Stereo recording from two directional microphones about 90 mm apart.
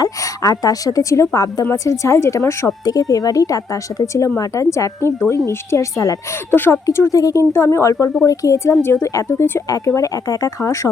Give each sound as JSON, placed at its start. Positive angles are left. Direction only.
{"t": 0.0, "sound": "speech", "side_deg": 40}
{"t": 6.5, "sound": "speech", "side_deg": 25}
{"t": 6.8, "sound": "speech", "side_deg": 35}